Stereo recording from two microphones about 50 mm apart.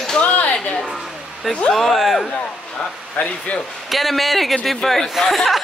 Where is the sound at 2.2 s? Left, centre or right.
Centre.